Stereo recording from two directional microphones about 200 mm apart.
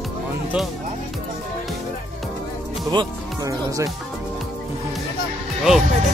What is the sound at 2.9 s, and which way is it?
Speech, 20° right (ahead or behind).